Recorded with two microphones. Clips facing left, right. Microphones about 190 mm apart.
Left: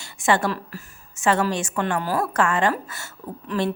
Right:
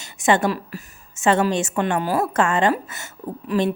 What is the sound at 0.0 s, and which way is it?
A woman's voice, 20° right (ahead or behind).